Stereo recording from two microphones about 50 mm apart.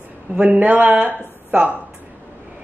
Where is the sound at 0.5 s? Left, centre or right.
Right.